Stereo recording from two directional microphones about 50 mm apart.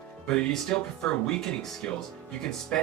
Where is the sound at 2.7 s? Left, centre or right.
Left.